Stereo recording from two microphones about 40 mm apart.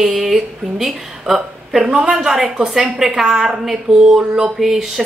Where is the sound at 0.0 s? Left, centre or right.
Centre.